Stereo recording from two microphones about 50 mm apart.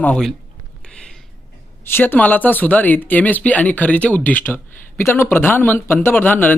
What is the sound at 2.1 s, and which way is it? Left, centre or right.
Speech, left.